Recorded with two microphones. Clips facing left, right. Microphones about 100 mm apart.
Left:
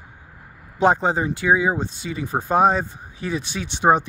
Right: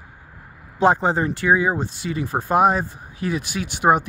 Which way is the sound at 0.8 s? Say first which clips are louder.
Right 1 dB; 20° left (ahead or behind).